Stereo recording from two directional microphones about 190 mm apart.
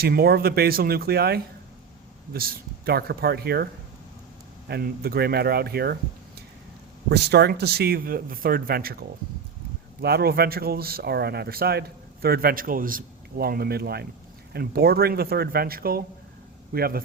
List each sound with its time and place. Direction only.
0.0 s speech: 55° right (ahead or behind)
4.7 s speech: 55° right (ahead or behind)
7.1 s speech: 60° right (ahead or behind)